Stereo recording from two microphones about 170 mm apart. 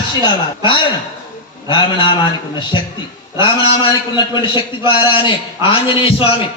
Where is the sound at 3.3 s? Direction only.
30° left (ahead or behind).